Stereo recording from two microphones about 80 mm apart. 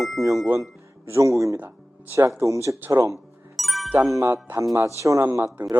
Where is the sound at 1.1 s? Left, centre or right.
Right.